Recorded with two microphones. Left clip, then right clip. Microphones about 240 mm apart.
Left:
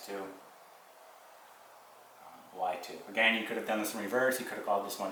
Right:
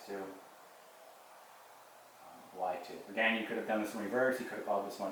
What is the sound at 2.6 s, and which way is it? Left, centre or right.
Speech, centre.